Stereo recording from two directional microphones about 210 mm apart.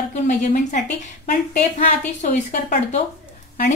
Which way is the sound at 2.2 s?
35° left (ahead or behind).